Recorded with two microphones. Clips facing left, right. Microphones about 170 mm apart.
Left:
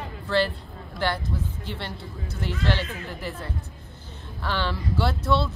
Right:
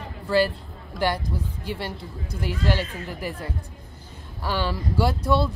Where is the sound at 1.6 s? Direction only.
10° right (ahead or behind).